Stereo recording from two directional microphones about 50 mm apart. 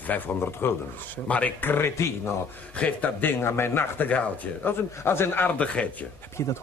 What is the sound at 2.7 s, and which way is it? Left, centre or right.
Speech, left.